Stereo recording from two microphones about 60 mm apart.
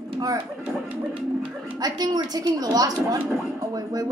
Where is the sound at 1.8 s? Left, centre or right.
Right.